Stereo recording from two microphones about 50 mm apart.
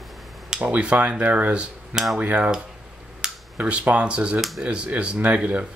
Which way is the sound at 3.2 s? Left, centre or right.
Centre.